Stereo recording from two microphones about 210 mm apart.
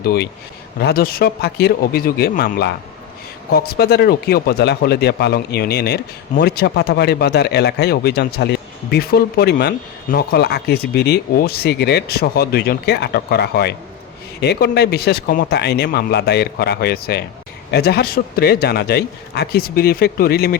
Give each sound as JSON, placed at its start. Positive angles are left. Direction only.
{"t": 0.0, "sound": "speech", "side_deg": 45}